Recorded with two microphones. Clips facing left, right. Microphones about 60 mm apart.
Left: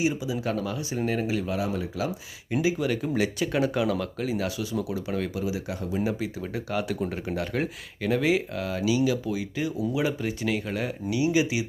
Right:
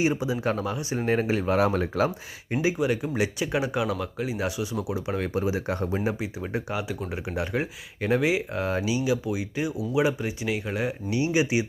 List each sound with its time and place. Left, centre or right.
0.0 s speech: right
1.5 s speech: right
2.0 s speech: right
2.7 s speech: centre; by 6.0 s right
6.1 s speech: centre
6.7 s speech: centre
7.3 s speech: centre
8.5 s speech: right
11.1 s speech: right